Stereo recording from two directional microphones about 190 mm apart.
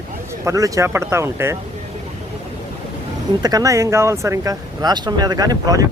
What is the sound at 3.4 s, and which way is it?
Speech, 20° right (ahead or behind).